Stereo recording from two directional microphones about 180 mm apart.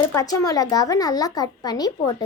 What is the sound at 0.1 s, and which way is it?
A child's voice, 20° left (ahead or behind).